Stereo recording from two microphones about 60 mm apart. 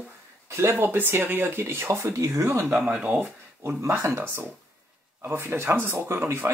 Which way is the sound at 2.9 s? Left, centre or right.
Right.